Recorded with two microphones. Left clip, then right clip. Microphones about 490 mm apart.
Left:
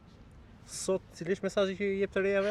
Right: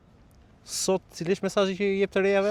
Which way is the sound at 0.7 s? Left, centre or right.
Right.